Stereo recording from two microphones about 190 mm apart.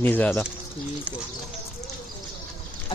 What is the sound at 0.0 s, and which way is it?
Speech, 10° left (ahead or behind).